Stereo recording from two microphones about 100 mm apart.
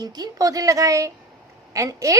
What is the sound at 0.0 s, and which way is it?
A woman's voice, 40° right (ahead or behind).